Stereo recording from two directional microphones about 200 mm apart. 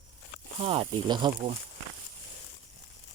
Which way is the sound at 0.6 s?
25° right (ahead or behind).